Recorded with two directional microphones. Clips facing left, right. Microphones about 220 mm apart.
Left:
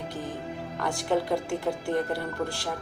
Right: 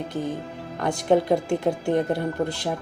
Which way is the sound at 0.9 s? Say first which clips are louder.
Right 7 dB; 20° right (ahead or behind).